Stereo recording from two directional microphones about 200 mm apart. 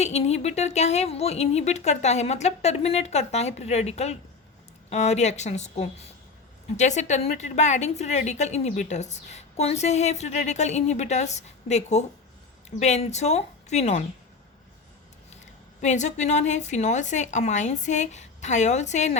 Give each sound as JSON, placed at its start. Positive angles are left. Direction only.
{"t": 0.0, "sound": "a woman's voice", "side_deg": 30}
{"t": 15.8, "sound": "a woman's voice", "side_deg": 35}